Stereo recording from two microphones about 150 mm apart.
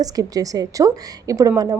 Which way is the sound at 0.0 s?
25° right (ahead or behind).